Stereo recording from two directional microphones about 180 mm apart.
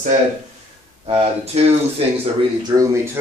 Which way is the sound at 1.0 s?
35° right (ahead or behind).